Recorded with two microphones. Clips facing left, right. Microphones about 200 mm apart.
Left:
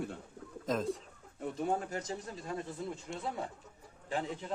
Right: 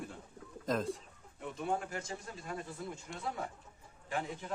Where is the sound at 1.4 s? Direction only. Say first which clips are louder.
Left 3 dB; 40° left (ahead or behind).